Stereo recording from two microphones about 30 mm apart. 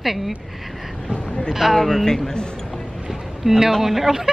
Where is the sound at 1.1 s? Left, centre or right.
Left.